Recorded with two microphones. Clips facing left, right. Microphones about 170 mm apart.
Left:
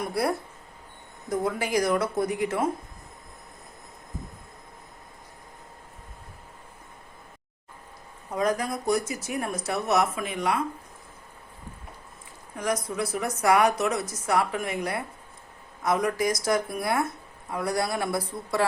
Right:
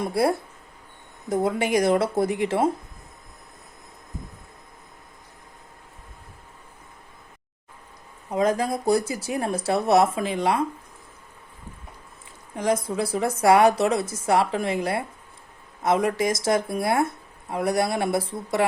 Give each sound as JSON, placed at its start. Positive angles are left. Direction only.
{"t": 0.0, "sound": "speech", "side_deg": -25}
{"t": 8.3, "sound": "speech", "side_deg": -25}
{"t": 12.5, "sound": "speech", "side_deg": -25}